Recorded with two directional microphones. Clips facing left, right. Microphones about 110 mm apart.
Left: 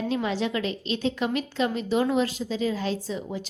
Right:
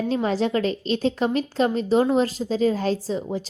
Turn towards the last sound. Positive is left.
turn(degrees=-35)  # may be behind; listen again after turning